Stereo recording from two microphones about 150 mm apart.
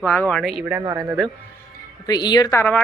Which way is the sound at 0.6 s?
10° right (ahead or behind).